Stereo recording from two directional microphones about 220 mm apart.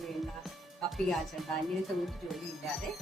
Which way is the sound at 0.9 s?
Centre (ahead or behind).